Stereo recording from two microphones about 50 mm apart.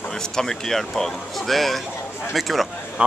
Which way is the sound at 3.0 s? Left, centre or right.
Right.